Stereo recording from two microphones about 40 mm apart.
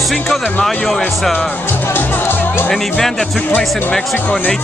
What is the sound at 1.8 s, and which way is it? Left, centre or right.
Music, left.